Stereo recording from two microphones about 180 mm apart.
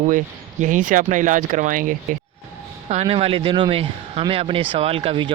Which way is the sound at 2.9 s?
35° right (ahead or behind).